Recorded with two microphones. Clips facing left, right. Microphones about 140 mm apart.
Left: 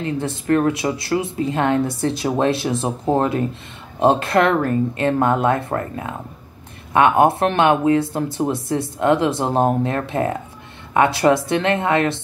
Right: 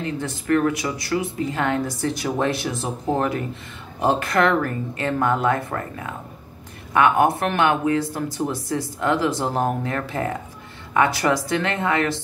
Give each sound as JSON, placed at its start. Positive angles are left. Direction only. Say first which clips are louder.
{"t": 0.2, "sound": "speech", "louder": "left 2 dB", "side_deg": 25}